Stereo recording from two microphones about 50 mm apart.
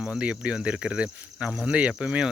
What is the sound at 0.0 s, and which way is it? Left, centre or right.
Speech, right.